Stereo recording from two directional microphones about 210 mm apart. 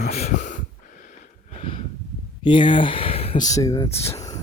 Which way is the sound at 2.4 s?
25° left (ahead or behind).